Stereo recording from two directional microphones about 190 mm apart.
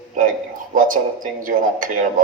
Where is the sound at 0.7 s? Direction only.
45° right (ahead or behind).